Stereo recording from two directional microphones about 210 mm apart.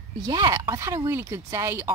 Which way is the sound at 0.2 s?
20° right (ahead or behind).